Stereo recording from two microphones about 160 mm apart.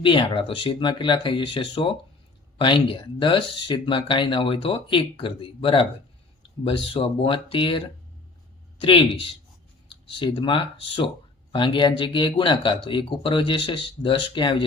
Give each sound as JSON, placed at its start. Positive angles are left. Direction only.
{"t": 0.0, "sound": "speech", "side_deg": 30}